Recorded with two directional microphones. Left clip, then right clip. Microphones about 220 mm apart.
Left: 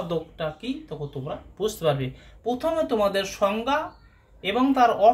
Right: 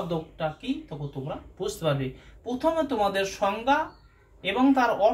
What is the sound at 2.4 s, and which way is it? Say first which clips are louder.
Speech: left 1 dB; 55° left (ahead or behind).